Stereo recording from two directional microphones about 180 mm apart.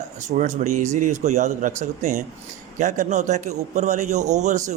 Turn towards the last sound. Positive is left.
turn(degrees=-40)  # may be behind; listen again after turning